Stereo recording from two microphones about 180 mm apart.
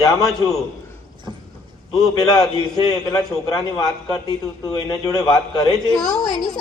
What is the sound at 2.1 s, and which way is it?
A man's voice, 20° left (ahead or behind).